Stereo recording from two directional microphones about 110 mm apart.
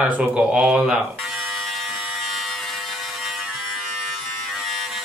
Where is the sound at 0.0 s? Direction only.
10° right (ahead or behind).